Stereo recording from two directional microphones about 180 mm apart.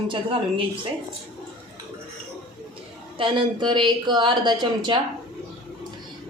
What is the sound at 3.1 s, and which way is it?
A woman's voice, 25° right (ahead or behind).